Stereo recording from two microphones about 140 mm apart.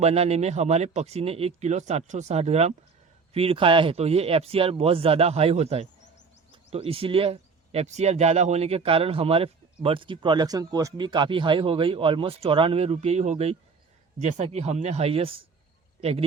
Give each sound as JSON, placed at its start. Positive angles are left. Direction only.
{"t": 0.0, "sound": "speech", "side_deg": -50}